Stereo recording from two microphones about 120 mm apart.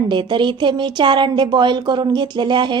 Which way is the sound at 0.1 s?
40° right (ahead or behind).